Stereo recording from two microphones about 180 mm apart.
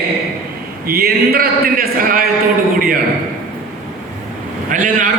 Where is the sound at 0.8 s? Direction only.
60° right (ahead or behind).